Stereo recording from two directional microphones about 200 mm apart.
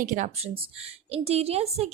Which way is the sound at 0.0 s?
40° right (ahead or behind).